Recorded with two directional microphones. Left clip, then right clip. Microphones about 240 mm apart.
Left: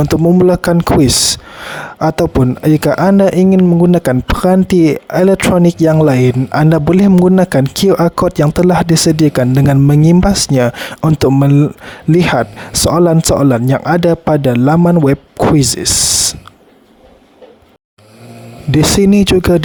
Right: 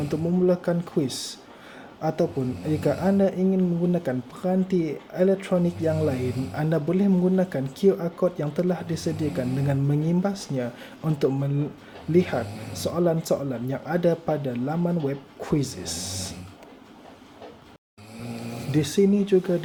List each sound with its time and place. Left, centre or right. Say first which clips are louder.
0.1 s speech: left 12 dB; left
18.7 s speech: left 12 dB; left